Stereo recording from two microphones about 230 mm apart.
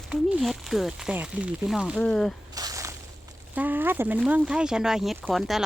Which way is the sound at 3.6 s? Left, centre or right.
Centre.